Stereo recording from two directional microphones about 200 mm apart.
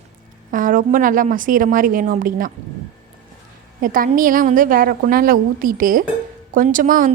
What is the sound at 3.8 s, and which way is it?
A woman's voice, 45° right (ahead or behind).